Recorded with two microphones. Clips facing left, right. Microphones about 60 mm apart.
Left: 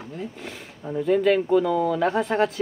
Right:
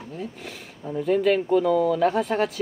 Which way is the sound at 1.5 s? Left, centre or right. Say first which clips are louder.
Right 1 dB; centre.